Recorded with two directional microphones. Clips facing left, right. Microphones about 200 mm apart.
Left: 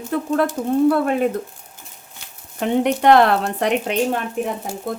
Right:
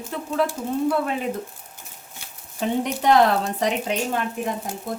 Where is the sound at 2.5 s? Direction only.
65° left (ahead or behind).